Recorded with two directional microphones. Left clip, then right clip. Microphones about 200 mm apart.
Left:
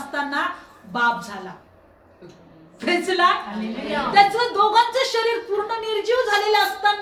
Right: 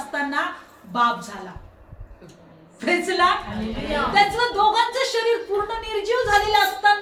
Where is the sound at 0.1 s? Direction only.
15° left (ahead or behind).